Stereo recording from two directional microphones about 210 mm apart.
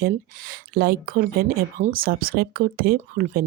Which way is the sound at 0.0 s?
45° right (ahead or behind).